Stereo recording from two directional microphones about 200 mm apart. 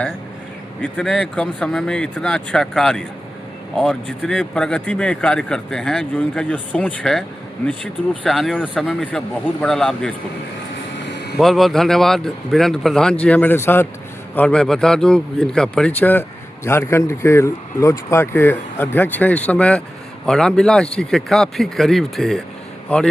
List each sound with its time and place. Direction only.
0.8 s speech: 5° left (ahead or behind)
11.1 s vehicle: 55° left (ahead or behind)
11.3 s speech: centre (ahead or behind)